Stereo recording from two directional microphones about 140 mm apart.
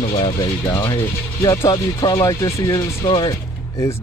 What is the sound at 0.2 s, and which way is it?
Speech, 30° left (ahead or behind).